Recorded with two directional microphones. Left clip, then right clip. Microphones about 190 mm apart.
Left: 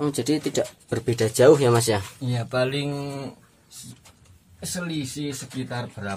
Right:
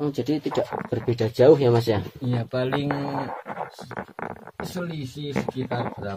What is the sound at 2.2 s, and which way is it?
Speech, 20° right (ahead or behind).